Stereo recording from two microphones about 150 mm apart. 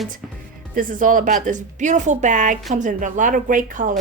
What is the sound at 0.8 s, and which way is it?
A woman's voice, 65° right (ahead or behind).